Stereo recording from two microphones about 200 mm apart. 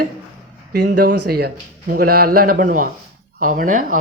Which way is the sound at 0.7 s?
45° right (ahead or behind).